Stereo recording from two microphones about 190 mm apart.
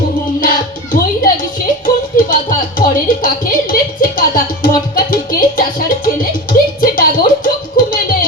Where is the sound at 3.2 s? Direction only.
50° left (ahead or behind).